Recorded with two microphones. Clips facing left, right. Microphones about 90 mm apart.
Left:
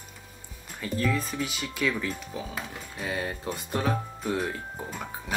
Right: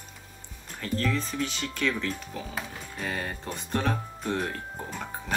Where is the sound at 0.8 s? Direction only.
10° left (ahead or behind).